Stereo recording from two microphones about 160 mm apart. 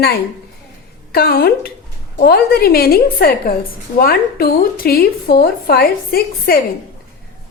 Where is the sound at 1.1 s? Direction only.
70° left (ahead or behind).